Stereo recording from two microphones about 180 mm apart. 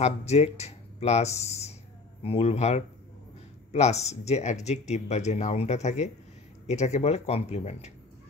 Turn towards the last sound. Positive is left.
turn(degrees=35)  # may be behind; listen again after turning